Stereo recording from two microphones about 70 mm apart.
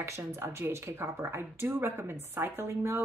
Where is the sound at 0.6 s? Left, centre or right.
Right.